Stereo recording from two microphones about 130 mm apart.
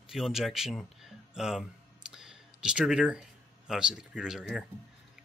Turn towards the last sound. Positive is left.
turn(degrees=-5)  # may be behind; listen again after turning